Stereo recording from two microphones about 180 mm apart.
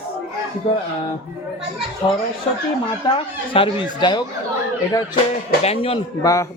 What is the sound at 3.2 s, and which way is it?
Speech, 30° left (ahead or behind).